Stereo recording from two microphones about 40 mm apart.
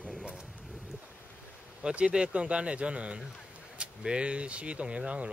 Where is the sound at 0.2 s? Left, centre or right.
Right.